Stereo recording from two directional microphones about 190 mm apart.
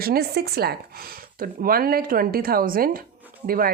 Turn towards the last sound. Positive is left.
turn(degrees=-50)  # may be behind; listen again after turning